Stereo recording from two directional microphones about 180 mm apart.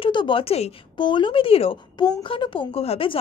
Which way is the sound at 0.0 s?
25° left (ahead or behind).